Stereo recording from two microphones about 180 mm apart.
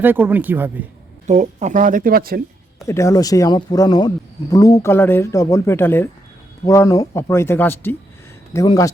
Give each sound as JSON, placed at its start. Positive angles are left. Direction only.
{"t": 0.0, "sound": "speech", "side_deg": -10}
{"t": 1.3, "sound": "speech", "side_deg": -40}
{"t": 2.8, "sound": "speech", "side_deg": 15}